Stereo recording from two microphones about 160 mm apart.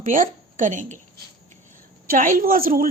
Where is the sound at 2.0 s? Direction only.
60° right (ahead or behind).